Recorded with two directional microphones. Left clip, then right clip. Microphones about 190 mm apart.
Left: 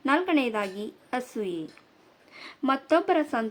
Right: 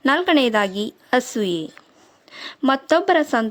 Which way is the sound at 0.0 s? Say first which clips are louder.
Right 7 dB; 50° right (ahead or behind).